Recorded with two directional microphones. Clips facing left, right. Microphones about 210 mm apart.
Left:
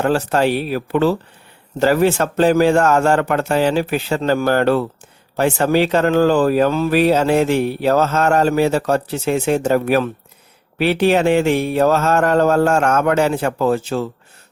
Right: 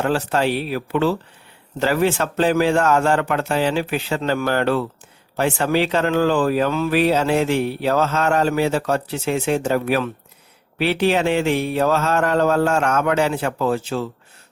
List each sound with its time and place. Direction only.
0.0 s speech: 45° left (ahead or behind)